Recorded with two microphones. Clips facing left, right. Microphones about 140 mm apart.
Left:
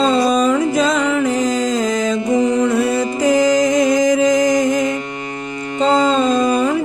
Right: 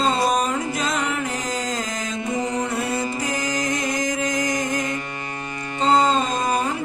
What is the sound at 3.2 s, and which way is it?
Music, 90° left.